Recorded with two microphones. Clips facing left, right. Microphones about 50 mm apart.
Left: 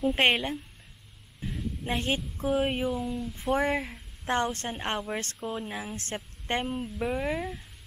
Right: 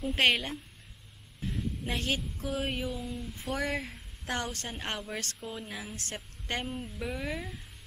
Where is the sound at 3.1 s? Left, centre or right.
Centre.